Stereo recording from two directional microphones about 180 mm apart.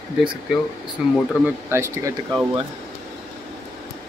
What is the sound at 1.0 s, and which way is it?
Speech, centre (ahead or behind).